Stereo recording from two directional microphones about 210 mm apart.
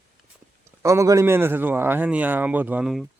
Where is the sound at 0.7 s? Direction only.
15° right (ahead or behind).